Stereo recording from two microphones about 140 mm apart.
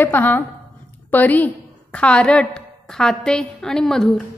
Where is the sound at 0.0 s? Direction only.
15° left (ahead or behind).